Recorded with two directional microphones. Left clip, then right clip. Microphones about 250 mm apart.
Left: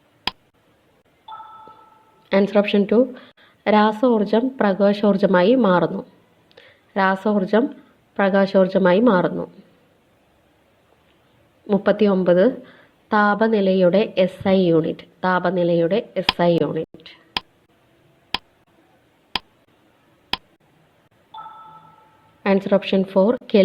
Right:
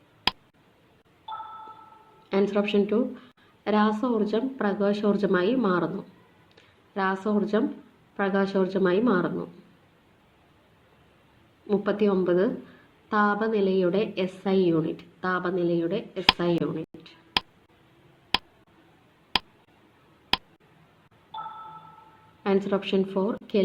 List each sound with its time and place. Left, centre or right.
0.3 s tick: centre
1.3 s a sound: centre
2.3 s a woman's voice: left
11.7 s a woman's voice: left
17.4 s tick: centre
19.3 s a sound: centre
22.4 s a woman's voice: left